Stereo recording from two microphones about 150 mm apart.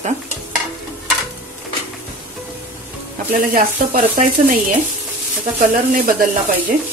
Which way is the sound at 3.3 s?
65° right (ahead or behind).